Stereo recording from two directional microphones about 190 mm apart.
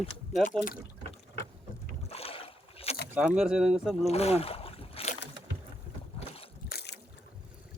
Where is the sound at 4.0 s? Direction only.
35° left (ahead or behind).